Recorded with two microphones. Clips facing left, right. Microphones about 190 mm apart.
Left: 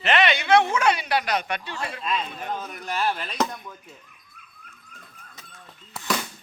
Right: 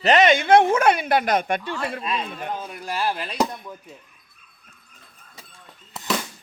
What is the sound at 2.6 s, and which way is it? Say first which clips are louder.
Speech: right 1 dB; 10° right (ahead or behind).